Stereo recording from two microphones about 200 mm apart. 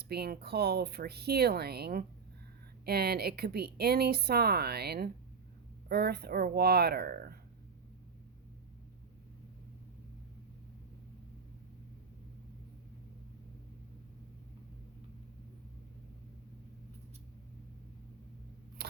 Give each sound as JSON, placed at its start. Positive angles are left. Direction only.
{"t": 0.0, "sound": "speech", "side_deg": -50}
{"t": 18.8, "sound": "camera", "side_deg": -55}